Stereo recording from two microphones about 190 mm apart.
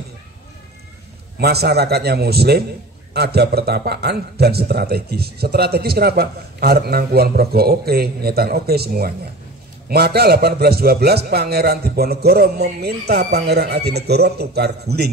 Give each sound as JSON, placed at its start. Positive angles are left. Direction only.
{"t": 1.4, "sound": "a man's voice", "side_deg": -60}